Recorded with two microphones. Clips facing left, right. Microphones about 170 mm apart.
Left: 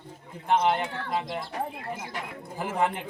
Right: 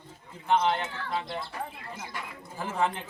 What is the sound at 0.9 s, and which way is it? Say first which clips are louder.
Speech: left 3 dB; 55° left (ahead or behind).